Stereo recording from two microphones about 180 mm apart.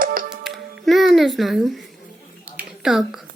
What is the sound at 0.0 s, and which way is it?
Music, 50° right (ahead or behind).